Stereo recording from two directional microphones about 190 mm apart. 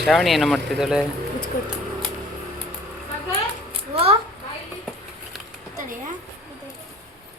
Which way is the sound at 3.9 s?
30° right (ahead or behind).